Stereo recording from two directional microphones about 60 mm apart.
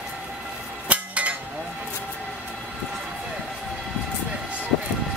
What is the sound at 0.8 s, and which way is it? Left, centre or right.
Cutlery, right.